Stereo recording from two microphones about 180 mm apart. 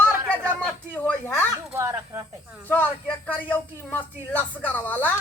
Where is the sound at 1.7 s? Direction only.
15° right (ahead or behind).